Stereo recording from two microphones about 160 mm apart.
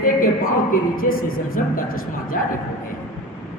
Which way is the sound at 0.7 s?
60° left (ahead or behind).